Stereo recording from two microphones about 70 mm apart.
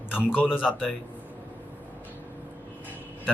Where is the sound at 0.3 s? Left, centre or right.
Left.